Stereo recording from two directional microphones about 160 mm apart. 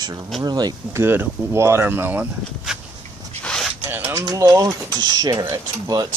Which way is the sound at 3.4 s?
5° left (ahead or behind).